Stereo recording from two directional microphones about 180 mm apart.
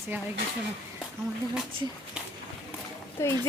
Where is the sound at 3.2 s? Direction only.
15° left (ahead or behind).